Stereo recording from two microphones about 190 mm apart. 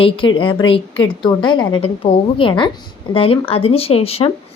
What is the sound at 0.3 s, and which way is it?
A woman's voice, 25° left (ahead or behind).